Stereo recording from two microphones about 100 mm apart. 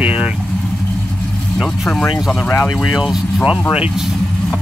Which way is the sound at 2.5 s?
25° left (ahead or behind).